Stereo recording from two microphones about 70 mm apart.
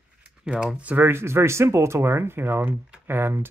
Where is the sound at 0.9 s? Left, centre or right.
Right.